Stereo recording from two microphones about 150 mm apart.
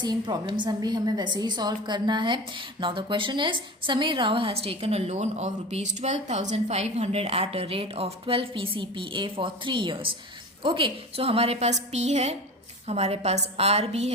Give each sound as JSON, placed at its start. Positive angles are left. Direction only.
{"t": 0.0, "sound": "a woman's voice", "side_deg": -30}